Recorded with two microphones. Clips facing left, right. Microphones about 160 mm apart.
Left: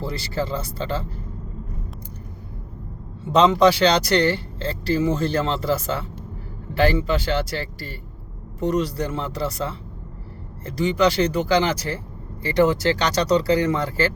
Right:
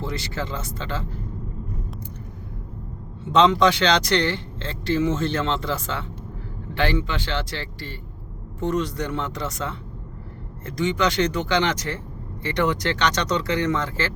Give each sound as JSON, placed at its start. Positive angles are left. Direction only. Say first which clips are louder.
{"t": 0.0, "sound": "speech", "louder": "left 3 dB", "side_deg": 35}
{"t": 3.3, "sound": "speech", "louder": "left 2 dB", "side_deg": 35}